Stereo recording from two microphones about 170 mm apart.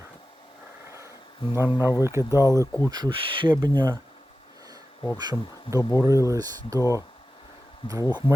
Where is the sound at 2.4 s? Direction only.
20° left (ahead or behind).